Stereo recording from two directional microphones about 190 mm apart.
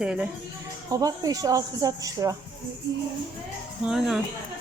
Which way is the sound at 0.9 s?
20° right (ahead or behind).